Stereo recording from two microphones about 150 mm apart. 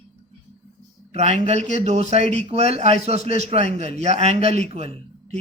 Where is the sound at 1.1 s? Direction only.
50° right (ahead or behind).